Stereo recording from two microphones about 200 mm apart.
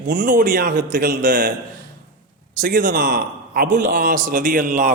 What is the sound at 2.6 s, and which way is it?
A man's voice, 45° right (ahead or behind).